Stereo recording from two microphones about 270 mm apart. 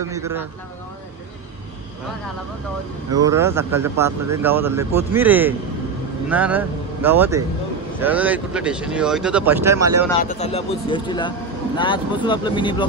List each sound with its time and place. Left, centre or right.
0.0 s speech: centre
3.3 s speech: centre
10.2 s speech: left